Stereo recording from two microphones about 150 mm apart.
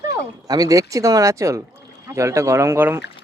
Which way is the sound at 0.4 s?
25° right (ahead or behind).